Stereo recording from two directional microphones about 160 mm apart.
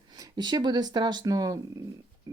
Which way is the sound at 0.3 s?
25° right (ahead or behind).